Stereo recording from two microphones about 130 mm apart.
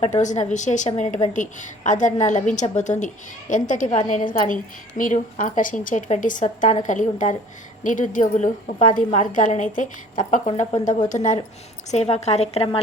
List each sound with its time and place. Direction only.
0.0 s a woman's voice: 65° left (ahead or behind)
3.9 s a woman's voice: 65° left (ahead or behind)
4.4 s a woman's voice: 90° left; by 11.3 s 70° left (ahead or behind)
11.9 s a woman's voice: 60° left (ahead or behind)